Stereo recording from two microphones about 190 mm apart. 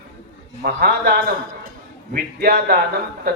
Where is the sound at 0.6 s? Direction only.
50° right (ahead or behind).